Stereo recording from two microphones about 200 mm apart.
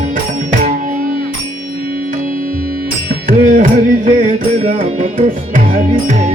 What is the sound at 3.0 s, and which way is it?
Music, 45° right (ahead or behind).